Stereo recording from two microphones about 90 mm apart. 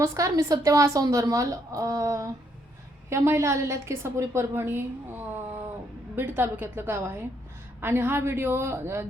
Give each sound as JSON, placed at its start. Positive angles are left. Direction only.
{"t": 0.0, "sound": "a woman's voice", "side_deg": -35}